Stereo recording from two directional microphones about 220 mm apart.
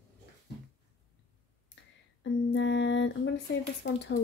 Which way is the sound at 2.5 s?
55° left (ahead or behind).